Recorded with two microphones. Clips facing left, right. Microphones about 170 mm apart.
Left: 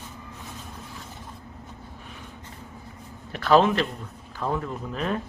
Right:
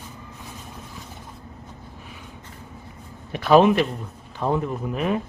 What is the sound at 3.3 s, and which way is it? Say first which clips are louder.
Speech: right 4 dB; 15° right (ahead or behind).